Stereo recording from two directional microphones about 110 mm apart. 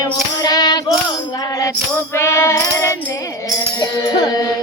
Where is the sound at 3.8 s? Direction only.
45° left (ahead or behind).